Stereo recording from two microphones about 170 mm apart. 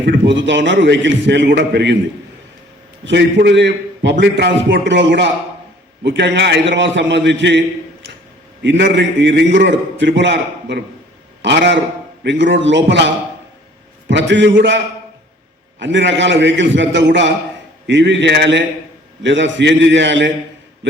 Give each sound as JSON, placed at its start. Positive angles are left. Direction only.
{"t": 0.3, "sound": "a man's voice", "side_deg": -90}
{"t": 3.0, "sound": "a man's voice", "side_deg": -90}
{"t": 8.6, "sound": "a man's voice", "side_deg": -90}
{"t": 14.1, "sound": "a man's voice", "side_deg": -90}
{"t": 15.8, "sound": "a man's voice", "side_deg": -90}